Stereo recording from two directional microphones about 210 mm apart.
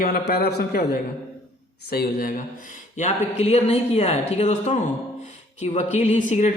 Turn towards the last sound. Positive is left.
turn(degrees=35)  # may be behind; listen again after turning